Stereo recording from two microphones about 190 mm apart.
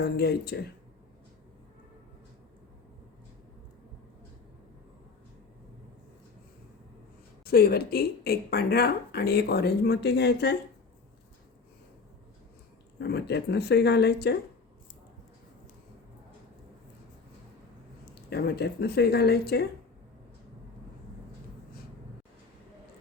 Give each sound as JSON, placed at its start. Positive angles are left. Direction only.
{"t": 0.0, "sound": "speech", "side_deg": 55}
{"t": 7.4, "sound": "speech", "side_deg": 55}
{"t": 13.0, "sound": "speech", "side_deg": 60}
{"t": 18.0, "sound": "speech", "side_deg": 55}